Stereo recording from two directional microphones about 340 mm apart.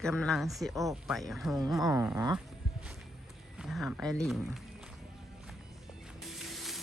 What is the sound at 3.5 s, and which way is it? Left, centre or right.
Speech, centre.